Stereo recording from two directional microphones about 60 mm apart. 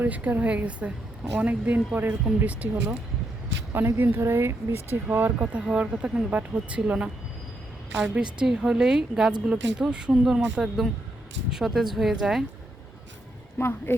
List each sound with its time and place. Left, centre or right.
0.0 s speech: right
3.7 s speech: right
5.4 s speech: centre
8.1 s a woman's voice: centre
13.6 s speech: left